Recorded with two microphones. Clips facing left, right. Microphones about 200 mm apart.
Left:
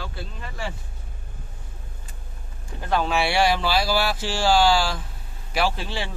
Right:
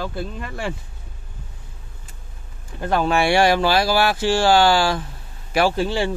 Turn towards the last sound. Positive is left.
turn(degrees=-45)  # may be behind; listen again after turning